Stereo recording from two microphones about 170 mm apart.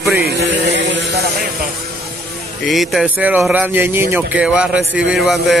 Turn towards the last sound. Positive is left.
turn(degrees=0)  # may be behind; listen again after turning